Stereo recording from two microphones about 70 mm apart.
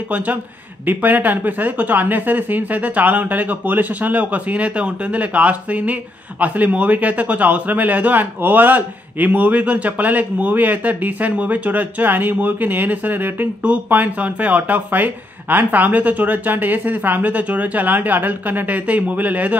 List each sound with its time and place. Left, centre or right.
0.8 s a man's voice: right